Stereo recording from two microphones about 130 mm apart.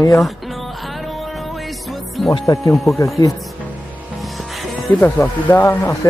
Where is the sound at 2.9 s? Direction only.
25° left (ahead or behind).